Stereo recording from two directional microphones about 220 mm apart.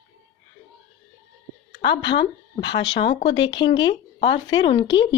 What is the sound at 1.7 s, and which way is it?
A woman's voice, 50° left (ahead or behind).